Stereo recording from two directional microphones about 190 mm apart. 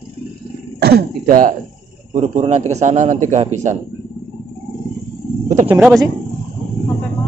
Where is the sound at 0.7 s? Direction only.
55° right (ahead or behind).